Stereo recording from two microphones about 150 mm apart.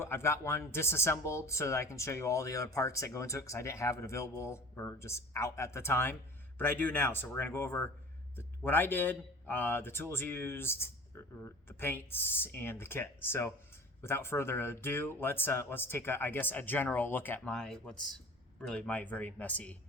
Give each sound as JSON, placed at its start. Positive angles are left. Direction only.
{"t": 0.0, "sound": "speech", "side_deg": 15}